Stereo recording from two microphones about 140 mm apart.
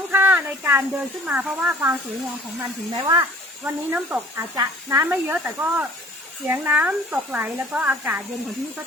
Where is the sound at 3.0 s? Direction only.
30° right (ahead or behind).